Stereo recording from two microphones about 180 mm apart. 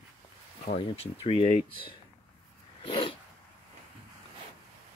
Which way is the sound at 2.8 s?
30° left (ahead or behind).